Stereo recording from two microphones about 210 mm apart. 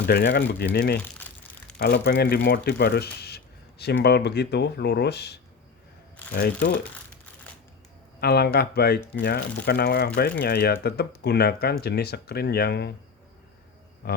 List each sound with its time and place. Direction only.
0.1 s speech: 50° left (ahead or behind)
8.2 s speech: 50° left (ahead or behind)